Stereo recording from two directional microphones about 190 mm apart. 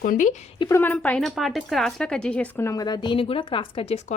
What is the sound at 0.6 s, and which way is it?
A woman's voice, 15° left (ahead or behind).